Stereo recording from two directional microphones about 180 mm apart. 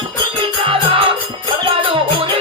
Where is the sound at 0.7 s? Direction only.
30° right (ahead or behind).